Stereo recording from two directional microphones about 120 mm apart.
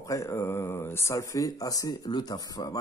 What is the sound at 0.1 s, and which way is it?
Speech, 25° left (ahead or behind).